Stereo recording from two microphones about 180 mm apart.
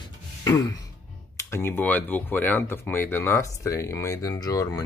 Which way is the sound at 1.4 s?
15° left (ahead or behind).